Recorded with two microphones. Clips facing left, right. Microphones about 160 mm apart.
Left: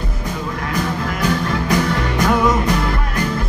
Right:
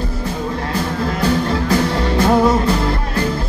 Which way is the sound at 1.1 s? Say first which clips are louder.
Right 3 dB; 30° right (ahead or behind).